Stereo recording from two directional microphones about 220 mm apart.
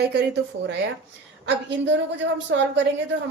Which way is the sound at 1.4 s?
55° right (ahead or behind).